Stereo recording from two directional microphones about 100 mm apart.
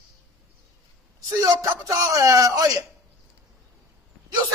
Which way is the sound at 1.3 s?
35° right (ahead or behind).